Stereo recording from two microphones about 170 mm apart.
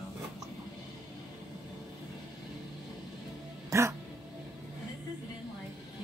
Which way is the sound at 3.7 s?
15° right (ahead or behind).